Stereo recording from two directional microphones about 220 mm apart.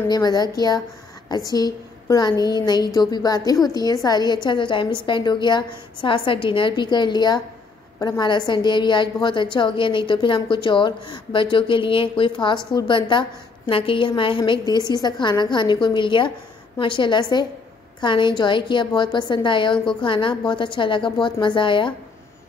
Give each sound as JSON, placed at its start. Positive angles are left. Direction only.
{"t": 0.1, "sound": "a woman's voice", "side_deg": 20}